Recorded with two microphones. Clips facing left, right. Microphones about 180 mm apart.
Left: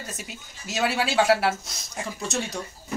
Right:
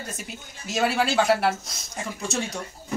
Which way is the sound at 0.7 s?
Centre (ahead or behind).